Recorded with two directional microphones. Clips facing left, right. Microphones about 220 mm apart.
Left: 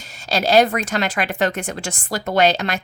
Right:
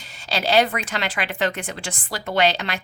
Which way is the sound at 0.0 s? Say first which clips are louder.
Left 4 dB; 45° left (ahead or behind).